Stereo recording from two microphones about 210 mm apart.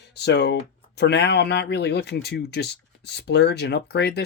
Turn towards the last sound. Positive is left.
turn(degrees=50)  # may be behind; listen again after turning